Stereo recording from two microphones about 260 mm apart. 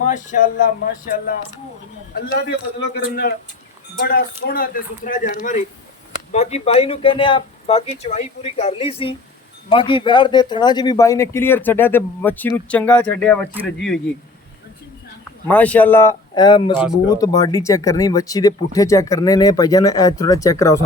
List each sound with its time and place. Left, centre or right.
0.0 s speech: left
2.8 s a man's voice: left; by 13.4 s centre
13.5 s speech: centre
15.4 s a man's voice: centre